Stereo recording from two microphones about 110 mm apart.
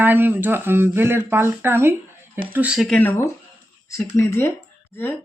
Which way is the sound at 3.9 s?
25° left (ahead or behind).